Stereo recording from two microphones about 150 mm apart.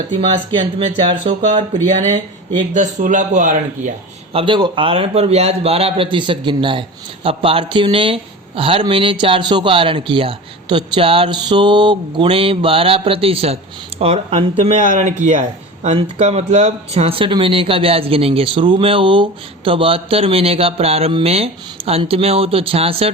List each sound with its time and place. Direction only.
0.1 s speech: 45° right (ahead or behind)
1.8 s speech: 55° right (ahead or behind)
4.3 s speech: 35° right (ahead or behind)
14.8 s speech: 55° right (ahead or behind); by 23.1 s 40° right (ahead or behind)